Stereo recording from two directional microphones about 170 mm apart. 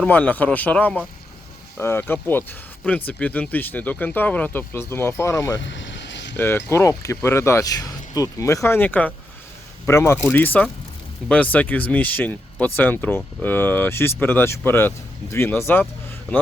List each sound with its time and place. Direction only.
0.0 s speech: 10° left (ahead or behind)
5.6 s vehicle: 90° left
6.3 s speech: 15° left (ahead or behind)